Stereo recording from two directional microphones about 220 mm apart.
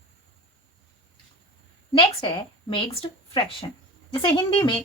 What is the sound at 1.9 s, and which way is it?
A woman's voice, 20° left (ahead or behind).